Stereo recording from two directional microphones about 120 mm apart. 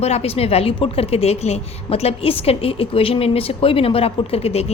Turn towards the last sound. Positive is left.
turn(degrees=60)  # may be behind; listen again after turning